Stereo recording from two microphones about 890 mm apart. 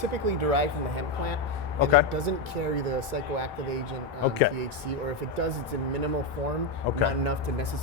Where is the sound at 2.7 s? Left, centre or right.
Right.